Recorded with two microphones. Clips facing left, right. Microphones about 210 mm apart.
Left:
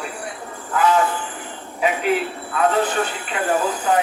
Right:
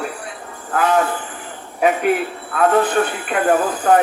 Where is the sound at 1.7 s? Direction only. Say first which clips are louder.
Right 3 dB; 50° right (ahead or behind).